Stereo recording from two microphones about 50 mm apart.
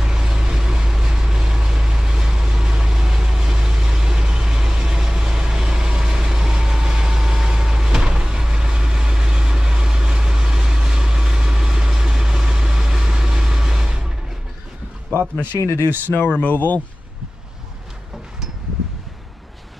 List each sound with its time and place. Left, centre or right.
0.0 s vehicle: centre
16.3 s speech: left